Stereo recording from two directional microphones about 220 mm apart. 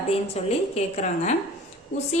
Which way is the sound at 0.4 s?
30° left (ahead or behind).